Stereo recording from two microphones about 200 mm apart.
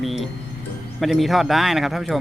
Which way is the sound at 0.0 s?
Centre (ahead or behind).